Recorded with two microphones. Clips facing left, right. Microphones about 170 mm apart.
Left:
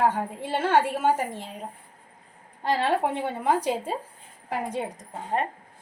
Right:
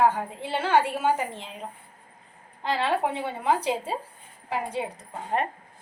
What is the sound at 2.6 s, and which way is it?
A woman's voice, 45° left (ahead or behind).